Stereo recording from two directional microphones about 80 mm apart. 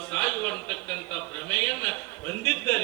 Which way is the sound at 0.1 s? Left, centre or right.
Centre.